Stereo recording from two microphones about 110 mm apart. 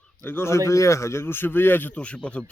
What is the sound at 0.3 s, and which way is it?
A man's voice, 20° left (ahead or behind).